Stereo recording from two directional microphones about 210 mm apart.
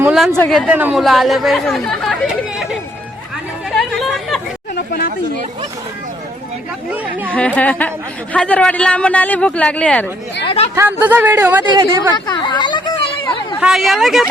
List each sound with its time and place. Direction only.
0.0 s speech: centre (ahead or behind)
3.8 s chatter: centre (ahead or behind)
4.7 s chatter: 45° left (ahead or behind)
7.3 s speech: 5° left (ahead or behind)
10.4 s speech: 25° left (ahead or behind)
10.8 s a woman's voice: 10° right (ahead or behind)
12.1 s a sound: 20° left (ahead or behind)
13.6 s speech: centre (ahead or behind)